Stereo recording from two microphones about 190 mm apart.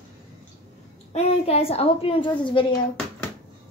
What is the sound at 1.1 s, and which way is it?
A woman's voice, 30° left (ahead or behind).